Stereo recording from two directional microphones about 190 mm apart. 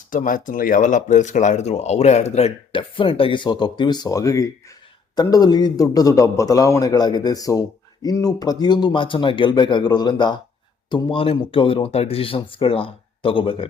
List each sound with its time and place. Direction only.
0.1 s speech: 45° left (ahead or behind); by 13.7 s 25° left (ahead or behind)